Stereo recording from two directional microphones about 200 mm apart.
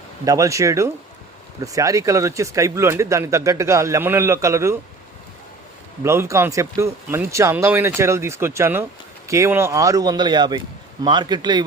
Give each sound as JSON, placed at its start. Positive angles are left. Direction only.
{"t": 0.3, "sound": "speech", "side_deg": -15}
{"t": 6.0, "sound": "a man's voice", "side_deg": -15}